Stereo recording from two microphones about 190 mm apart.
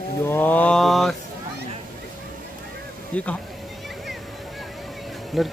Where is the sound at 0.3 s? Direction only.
10° left (ahead or behind).